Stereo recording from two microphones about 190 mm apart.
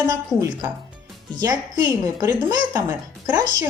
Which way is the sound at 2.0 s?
15° right (ahead or behind).